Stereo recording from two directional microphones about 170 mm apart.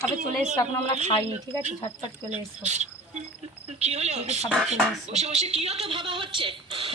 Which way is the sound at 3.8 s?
40° right (ahead or behind).